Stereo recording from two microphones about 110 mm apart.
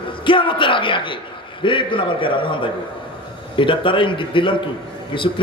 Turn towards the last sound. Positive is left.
turn(degrees=50)  # may be behind; listen again after turning